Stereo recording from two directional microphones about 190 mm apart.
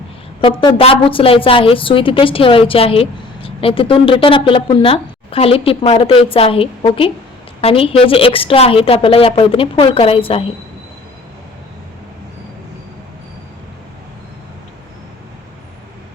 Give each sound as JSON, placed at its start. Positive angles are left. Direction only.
{"t": 0.8, "sound": "a woman's voice", "side_deg": 30}